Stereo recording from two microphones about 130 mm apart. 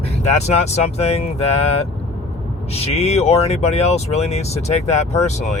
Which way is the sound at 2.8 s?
55° left (ahead or behind).